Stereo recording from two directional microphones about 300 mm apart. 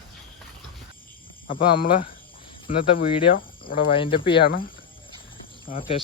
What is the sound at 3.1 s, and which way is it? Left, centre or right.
Cricket, left.